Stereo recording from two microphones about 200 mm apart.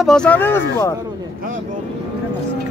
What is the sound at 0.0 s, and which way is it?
Speech, 5° left (ahead or behind).